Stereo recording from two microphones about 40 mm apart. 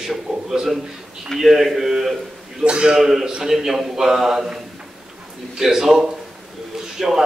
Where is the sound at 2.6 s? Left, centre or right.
Right.